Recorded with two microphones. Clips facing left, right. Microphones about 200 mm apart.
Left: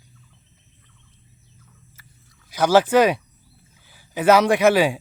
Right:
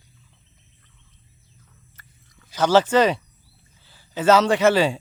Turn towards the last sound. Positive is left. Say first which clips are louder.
# left 1 dB
turn(degrees=10)  # may be behind; listen again after turning